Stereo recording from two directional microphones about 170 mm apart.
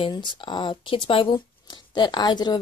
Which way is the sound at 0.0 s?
30° left (ahead or behind).